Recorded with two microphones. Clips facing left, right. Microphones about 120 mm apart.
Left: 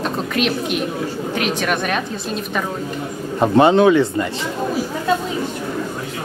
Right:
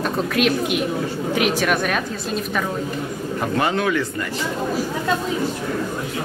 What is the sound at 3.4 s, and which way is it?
Speech, 25° left (ahead or behind).